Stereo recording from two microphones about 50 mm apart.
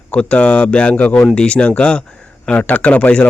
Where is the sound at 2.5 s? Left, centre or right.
Left.